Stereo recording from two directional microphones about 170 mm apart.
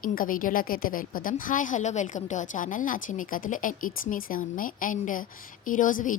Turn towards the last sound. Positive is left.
turn(degrees=50)  # may be behind; listen again after turning